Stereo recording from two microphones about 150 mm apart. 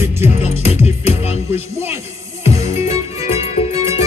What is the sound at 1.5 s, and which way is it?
Music, 15° right (ahead or behind).